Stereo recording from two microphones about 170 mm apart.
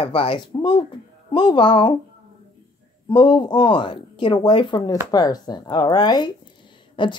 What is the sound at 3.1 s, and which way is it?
A woman's voice, 25° left (ahead or behind).